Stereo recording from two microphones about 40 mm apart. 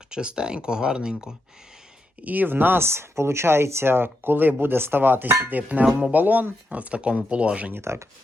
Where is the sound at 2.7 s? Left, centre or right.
Right.